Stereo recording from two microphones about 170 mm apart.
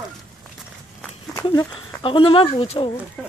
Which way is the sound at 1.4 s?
30° left (ahead or behind).